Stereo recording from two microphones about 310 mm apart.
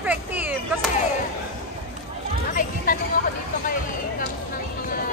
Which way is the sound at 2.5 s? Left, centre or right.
Left.